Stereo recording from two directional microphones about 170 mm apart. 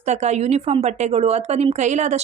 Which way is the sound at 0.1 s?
40° right (ahead or behind).